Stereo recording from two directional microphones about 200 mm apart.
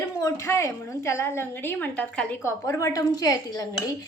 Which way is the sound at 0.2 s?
15° left (ahead or behind).